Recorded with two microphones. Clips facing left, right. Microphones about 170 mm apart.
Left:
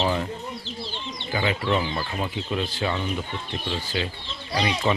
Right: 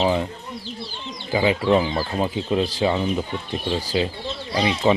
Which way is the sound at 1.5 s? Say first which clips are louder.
Right 6 dB; 30° right (ahead or behind).